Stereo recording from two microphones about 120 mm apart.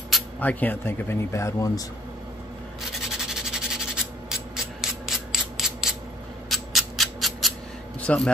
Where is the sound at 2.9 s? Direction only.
5° right (ahead or behind).